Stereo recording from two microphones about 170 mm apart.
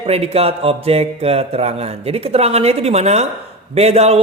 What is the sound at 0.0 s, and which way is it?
A man's voice, 35° right (ahead or behind).